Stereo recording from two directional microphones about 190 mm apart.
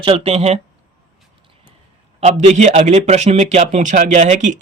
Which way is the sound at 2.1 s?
35° right (ahead or behind).